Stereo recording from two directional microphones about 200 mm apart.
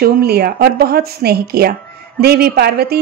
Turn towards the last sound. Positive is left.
turn(degrees=-55)  # may be behind; listen again after turning